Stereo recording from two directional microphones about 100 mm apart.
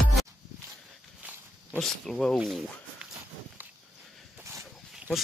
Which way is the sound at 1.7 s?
5° left (ahead or behind).